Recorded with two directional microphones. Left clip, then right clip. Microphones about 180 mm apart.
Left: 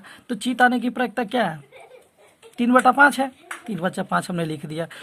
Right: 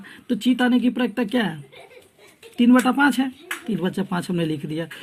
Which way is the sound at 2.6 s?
50° left (ahead or behind).